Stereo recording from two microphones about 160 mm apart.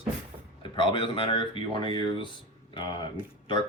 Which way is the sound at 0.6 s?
30° left (ahead or behind).